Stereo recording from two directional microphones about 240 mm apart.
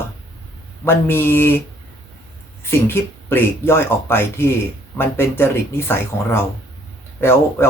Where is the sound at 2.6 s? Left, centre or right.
Centre.